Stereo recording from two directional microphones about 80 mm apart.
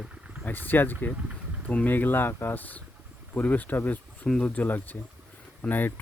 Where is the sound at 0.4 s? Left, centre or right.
Left.